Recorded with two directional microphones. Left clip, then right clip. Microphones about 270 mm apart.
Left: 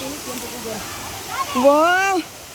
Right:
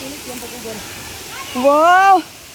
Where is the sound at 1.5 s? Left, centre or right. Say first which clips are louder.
Right 4 dB; centre.